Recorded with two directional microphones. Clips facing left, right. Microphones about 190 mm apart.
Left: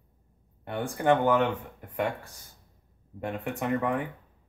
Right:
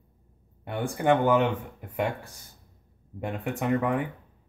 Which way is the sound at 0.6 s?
5° right (ahead or behind).